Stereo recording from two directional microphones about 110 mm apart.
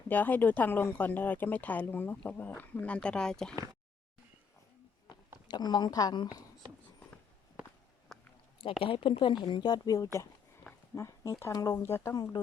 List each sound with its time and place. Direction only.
0.1 s speech: 15° left (ahead or behind)
5.5 s speech: 40° left (ahead or behind)
7.6 s walk: 5° right (ahead or behind)
8.8 s speech: 55° left (ahead or behind); by 11.8 s 35° left (ahead or behind)
11.8 s speech: 20° left (ahead or behind)
12.1 s speech: 35° left (ahead or behind)